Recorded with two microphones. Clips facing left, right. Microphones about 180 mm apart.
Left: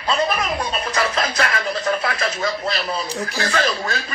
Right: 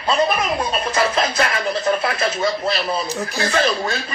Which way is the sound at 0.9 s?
25° right (ahead or behind).